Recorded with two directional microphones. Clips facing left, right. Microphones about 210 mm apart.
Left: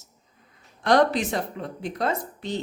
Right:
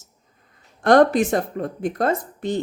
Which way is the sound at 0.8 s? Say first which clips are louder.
Right 5 dB; 50° right (ahead or behind).